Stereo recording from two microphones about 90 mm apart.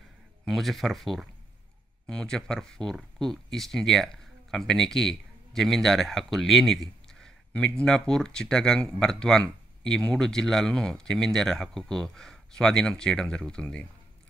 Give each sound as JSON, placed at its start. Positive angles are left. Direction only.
{"t": 0.5, "sound": "speech", "side_deg": 0}